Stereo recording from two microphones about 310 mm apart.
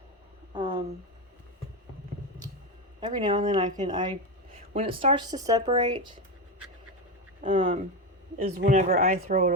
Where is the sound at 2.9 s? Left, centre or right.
Centre.